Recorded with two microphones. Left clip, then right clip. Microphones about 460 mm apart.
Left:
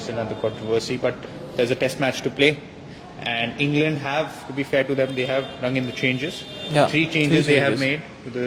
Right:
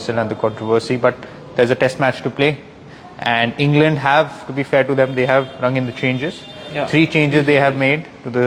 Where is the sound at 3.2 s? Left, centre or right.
Right.